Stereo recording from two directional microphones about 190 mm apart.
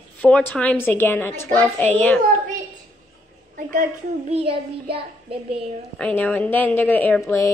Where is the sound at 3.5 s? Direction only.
45° right (ahead or behind).